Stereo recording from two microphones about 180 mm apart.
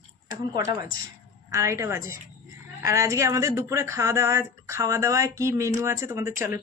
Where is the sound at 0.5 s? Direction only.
20° right (ahead or behind).